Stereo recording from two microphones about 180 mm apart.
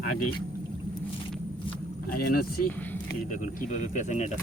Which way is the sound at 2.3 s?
55° left (ahead or behind).